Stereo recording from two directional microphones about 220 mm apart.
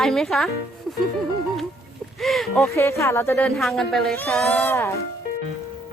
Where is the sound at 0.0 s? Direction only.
Centre (ahead or behind).